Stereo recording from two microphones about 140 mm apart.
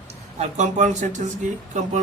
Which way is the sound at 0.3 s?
55° right (ahead or behind).